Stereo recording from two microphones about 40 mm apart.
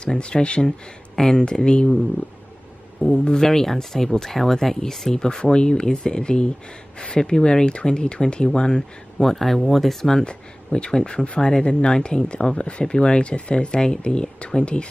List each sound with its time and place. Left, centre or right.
0.0 s speech: left
0.6 s speech: centre
3.1 s speech: centre
10.2 s speech: left